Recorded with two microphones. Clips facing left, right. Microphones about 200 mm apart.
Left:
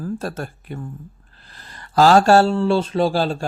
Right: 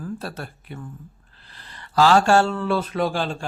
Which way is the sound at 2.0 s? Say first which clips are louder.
Left 4 dB; 40° left (ahead or behind).